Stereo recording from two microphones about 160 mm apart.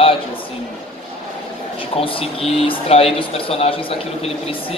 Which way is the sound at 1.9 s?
35° left (ahead or behind).